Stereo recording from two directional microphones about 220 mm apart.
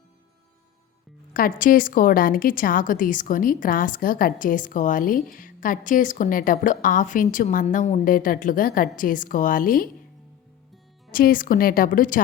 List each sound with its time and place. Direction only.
1.3 s a woman's voice: 40° left (ahead or behind)
11.1 s a woman's voice: 40° left (ahead or behind)